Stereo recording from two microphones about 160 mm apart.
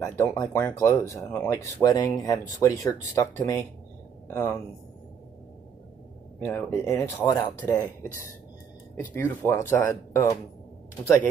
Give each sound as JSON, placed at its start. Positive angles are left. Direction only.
{"t": 0.0, "sound": "speech", "side_deg": 20}
{"t": 6.4, "sound": "speech", "side_deg": 15}
{"t": 9.1, "sound": "speech", "side_deg": 15}